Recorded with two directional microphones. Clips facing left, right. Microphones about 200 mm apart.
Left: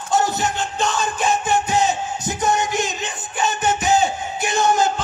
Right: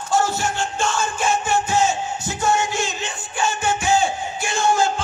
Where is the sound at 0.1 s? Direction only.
20° left (ahead or behind).